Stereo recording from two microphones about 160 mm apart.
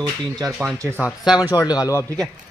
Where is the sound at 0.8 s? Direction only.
15° right (ahead or behind).